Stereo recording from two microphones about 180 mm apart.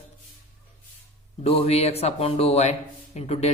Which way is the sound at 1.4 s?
35° left (ahead or behind).